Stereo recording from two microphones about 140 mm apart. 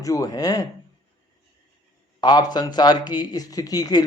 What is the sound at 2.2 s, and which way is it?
A man's voice, 30° left (ahead or behind).